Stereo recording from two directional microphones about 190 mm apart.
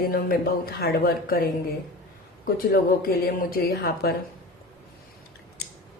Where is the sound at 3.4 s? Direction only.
55° left (ahead or behind).